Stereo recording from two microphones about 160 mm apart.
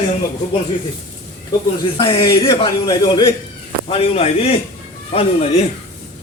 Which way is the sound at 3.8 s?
35° left (ahead or behind).